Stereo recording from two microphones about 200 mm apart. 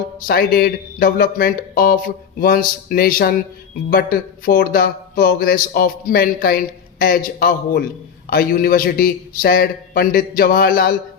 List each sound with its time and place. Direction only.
0.3 s a man's voice: 50° left (ahead or behind)